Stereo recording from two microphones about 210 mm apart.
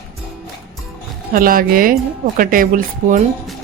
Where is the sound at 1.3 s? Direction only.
45° right (ahead or behind).